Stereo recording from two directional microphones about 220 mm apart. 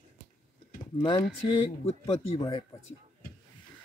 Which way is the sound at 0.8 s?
20° left (ahead or behind).